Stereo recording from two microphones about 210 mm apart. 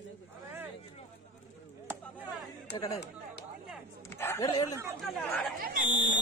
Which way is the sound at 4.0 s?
10° left (ahead or behind).